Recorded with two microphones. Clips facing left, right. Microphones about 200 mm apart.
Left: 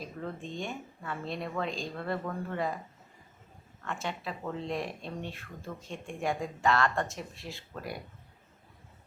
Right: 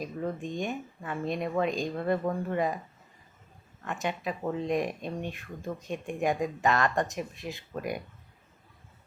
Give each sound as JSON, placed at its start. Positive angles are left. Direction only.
{"t": 0.0, "sound": "speech", "side_deg": -15}
{"t": 3.8, "sound": "speech", "side_deg": -15}